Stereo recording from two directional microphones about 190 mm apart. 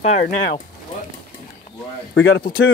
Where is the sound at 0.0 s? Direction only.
35° left (ahead or behind).